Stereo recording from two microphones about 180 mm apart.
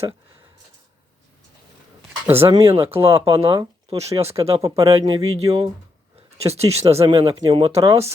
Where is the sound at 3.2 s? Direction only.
30° right (ahead or behind).